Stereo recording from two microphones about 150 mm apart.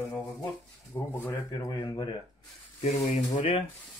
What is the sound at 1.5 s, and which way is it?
Speech, 25° left (ahead or behind).